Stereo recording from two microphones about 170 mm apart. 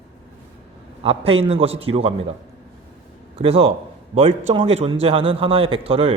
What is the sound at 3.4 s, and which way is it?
A man's voice, 35° right (ahead or behind).